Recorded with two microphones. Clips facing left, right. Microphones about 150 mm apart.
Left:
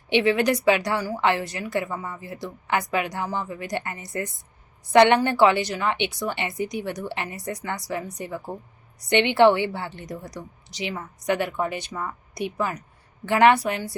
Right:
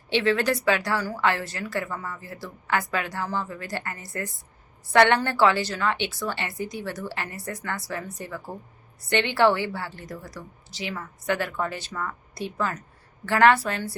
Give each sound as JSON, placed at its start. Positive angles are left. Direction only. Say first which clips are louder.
{"t": 0.1, "sound": "a woman's voice", "louder": "left 3 dB", "side_deg": 15}